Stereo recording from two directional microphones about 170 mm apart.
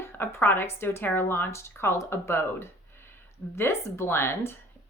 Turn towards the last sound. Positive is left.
turn(degrees=15)  # may be behind; listen again after turning